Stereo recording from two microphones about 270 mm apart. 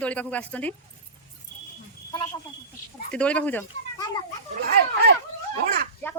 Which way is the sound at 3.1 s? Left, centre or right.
Centre.